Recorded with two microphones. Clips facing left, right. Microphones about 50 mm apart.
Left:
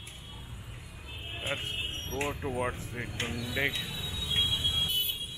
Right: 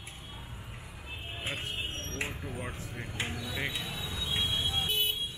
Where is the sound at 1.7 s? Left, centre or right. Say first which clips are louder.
Left 1 dB; centre.